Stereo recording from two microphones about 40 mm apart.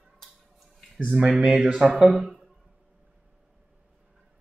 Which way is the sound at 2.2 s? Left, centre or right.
Centre.